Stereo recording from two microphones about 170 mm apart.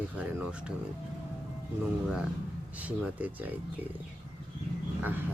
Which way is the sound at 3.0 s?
10° right (ahead or behind).